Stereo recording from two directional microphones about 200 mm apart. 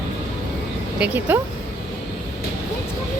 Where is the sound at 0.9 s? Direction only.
10° right (ahead or behind).